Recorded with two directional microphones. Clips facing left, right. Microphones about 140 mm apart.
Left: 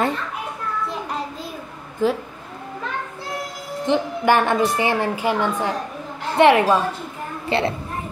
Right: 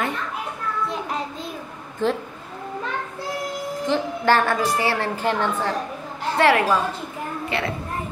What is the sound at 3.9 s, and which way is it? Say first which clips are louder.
A woman's voice: left 2 dB; 20° left (ahead or behind).